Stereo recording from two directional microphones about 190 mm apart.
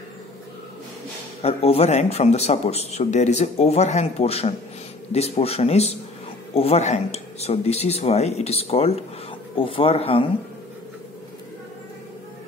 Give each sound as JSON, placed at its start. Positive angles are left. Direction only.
{"t": 1.4, "sound": "speech", "side_deg": 30}